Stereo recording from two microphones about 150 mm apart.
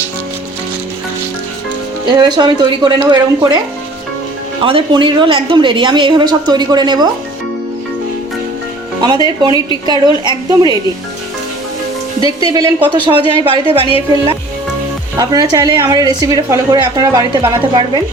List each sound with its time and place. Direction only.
2.0 s a woman's voice: 30° right (ahead or behind)
4.6 s a woman's voice: 35° right (ahead or behind)
9.0 s a woman's voice: 30° right (ahead or behind)
12.2 s a woman's voice: 25° right (ahead or behind)
15.2 s a woman's voice: 25° right (ahead or behind)